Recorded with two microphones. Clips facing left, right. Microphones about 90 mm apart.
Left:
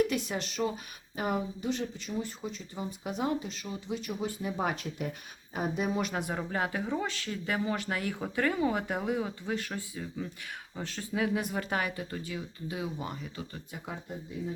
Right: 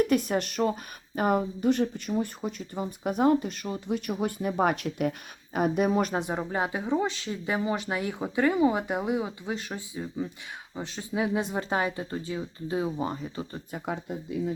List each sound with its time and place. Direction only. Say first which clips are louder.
0.1 s speech: right 8 dB; 50° right (ahead or behind)
6.1 s speech: right 4 dB; 20° right (ahead or behind)